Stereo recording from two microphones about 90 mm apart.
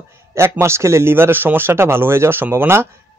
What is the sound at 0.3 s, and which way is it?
Speech, 30° right (ahead or behind).